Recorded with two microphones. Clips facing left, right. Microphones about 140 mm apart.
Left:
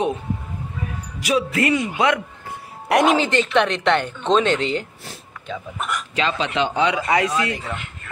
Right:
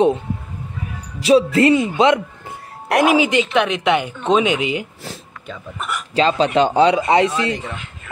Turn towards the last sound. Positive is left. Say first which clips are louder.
# right 4 dB
turn(degrees=-25)  # may be behind; listen again after turning